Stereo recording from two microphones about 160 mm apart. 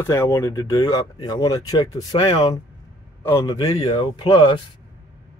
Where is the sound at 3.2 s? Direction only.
20° left (ahead or behind).